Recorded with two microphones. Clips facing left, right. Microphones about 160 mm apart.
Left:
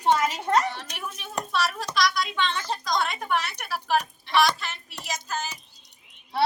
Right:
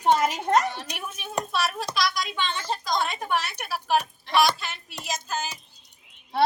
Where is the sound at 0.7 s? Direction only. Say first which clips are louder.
Right 1 dB; 10° right (ahead or behind).